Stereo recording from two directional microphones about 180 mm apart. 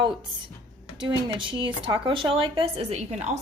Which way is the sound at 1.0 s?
25° right (ahead or behind).